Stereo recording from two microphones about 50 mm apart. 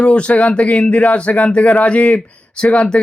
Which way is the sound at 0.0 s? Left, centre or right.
Left.